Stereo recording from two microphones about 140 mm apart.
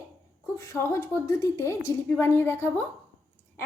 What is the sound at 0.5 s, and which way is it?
A woman's voice, 20° left (ahead or behind).